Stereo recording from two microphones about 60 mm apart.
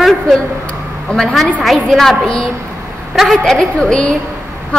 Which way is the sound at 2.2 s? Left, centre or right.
Centre.